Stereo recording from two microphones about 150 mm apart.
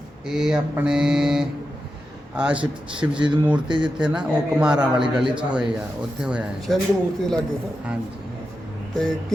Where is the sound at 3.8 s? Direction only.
5° right (ahead or behind).